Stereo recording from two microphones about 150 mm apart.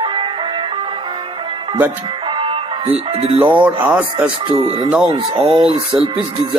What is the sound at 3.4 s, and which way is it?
Speech, 15° right (ahead or behind).